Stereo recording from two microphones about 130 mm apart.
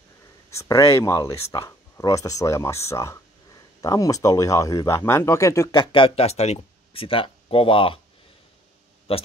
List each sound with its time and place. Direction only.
0.5 s speech: 25° left (ahead or behind)
5.8 s speech: 40° left (ahead or behind)
9.1 s speech: 45° left (ahead or behind)